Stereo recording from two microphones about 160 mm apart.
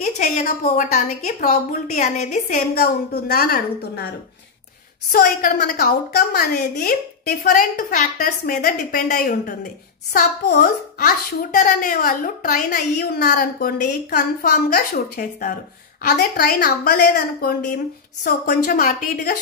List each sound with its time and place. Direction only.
0.0 s a woman's voice: 50° left (ahead or behind)
2.7 s a woman's voice: 80° left
5.1 s a woman's voice: 65° left (ahead or behind)
7.6 s a child's voice: 55° left (ahead or behind)
10.1 s a child's voice: 70° left (ahead or behind)
16.0 s a woman's voice: 75° left (ahead or behind)